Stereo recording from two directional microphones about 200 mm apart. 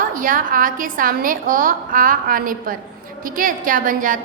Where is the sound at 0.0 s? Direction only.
45° right (ahead or behind).